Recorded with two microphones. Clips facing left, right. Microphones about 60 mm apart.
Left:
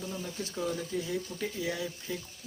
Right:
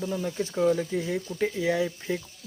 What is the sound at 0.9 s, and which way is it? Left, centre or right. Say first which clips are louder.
Speech: right 6 dB; right.